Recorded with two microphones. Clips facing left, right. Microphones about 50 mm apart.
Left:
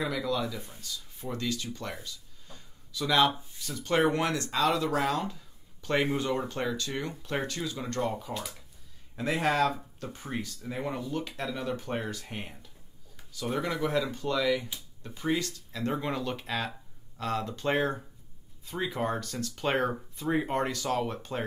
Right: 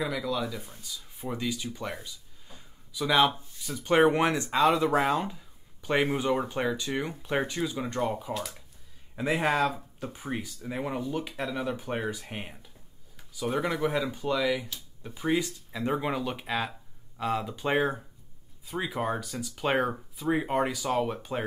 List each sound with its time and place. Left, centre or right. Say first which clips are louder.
0.0 s speech: even; centre
8.3 s speech: right 3 dB; centre
9.1 s speech: right 1 dB; centre